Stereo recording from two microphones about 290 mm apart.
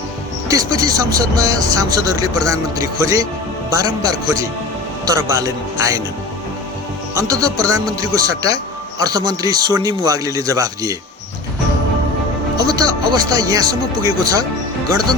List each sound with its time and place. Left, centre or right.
0.5 s a man's voice: centre
7.1 s a man's voice: centre
12.7 s a man's voice: centre